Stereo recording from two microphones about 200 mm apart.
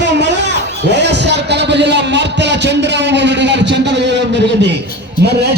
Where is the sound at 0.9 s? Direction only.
60° right (ahead or behind).